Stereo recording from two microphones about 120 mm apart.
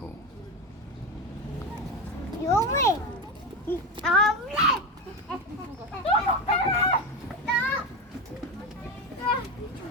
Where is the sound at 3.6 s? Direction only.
5° left (ahead or behind).